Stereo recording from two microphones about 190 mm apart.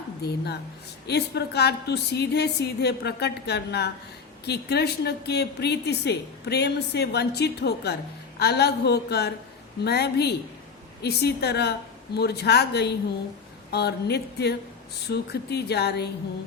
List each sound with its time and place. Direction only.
0.2 s a woman's voice: 60° left (ahead or behind)